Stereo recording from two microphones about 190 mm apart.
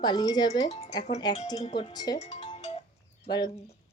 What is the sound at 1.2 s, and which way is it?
Speech, 20° left (ahead or behind).